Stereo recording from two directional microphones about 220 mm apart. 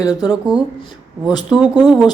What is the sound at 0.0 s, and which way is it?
Speech, 15° left (ahead or behind).